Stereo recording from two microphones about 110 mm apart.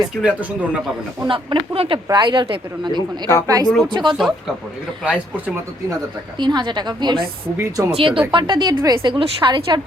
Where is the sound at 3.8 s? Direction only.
45° right (ahead or behind).